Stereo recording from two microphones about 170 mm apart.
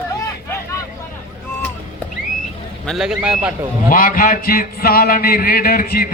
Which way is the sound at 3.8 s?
55° left (ahead or behind).